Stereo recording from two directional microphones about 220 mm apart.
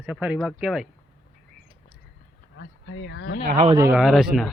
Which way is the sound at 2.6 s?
55° left (ahead or behind).